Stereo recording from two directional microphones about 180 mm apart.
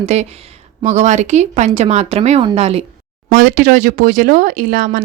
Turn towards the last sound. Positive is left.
turn(degrees=-50)  # may be behind; listen again after turning